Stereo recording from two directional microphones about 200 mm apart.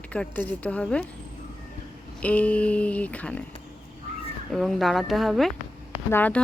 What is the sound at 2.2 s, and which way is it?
A woman's voice, 5° left (ahead or behind).